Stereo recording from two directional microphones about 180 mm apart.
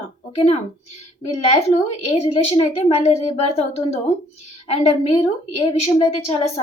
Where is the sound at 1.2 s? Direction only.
35° left (ahead or behind).